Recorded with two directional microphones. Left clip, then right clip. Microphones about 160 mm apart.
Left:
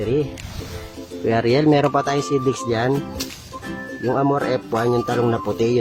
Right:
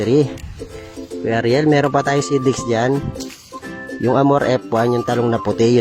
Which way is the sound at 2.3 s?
40° right (ahead or behind).